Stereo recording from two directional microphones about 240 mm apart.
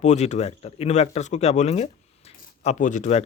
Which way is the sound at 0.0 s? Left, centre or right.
Left.